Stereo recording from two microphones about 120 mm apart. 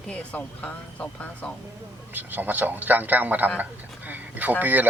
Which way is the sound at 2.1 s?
15° right (ahead or behind).